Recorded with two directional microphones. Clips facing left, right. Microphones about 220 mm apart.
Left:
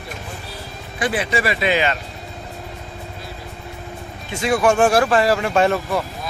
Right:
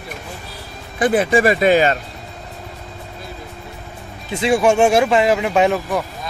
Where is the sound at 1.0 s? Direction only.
50° right (ahead or behind).